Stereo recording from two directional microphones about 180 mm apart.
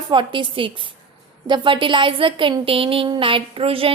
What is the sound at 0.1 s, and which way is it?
A woman's voice, 25° right (ahead or behind).